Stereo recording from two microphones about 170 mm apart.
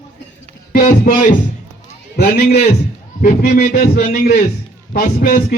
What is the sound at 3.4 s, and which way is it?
A man's voice, 60° left (ahead or behind).